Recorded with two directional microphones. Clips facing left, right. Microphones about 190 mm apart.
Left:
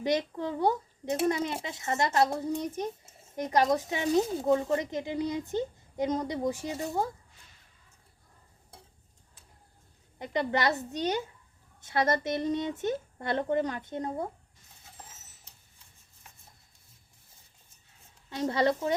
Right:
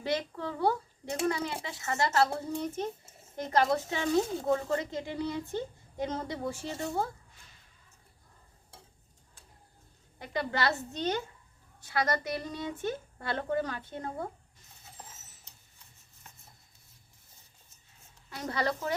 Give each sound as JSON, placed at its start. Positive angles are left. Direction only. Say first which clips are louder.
{"t": 0.0, "sound": "speech", "louder": "left 4 dB", "side_deg": 20}
{"t": 10.2, "sound": "speech", "louder": "left 3 dB", "side_deg": 20}
{"t": 11.8, "sound": "speech", "louder": "left 3 dB", "side_deg": 25}
{"t": 18.3, "sound": "speech", "louder": "left 6 dB", "side_deg": 25}